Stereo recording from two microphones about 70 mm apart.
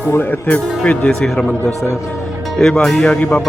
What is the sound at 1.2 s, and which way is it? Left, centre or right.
Speech, centre.